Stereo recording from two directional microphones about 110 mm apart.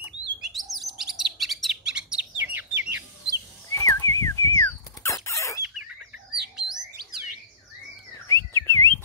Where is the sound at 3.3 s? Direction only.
30° left (ahead or behind).